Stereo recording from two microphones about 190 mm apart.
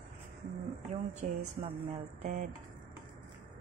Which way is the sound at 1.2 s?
40° right (ahead or behind).